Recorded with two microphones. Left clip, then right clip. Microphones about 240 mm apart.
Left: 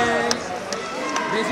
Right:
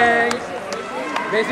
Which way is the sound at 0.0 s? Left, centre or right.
Centre.